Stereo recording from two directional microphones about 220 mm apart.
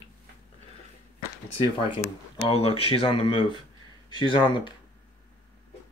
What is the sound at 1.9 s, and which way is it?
Speech, 25° left (ahead or behind).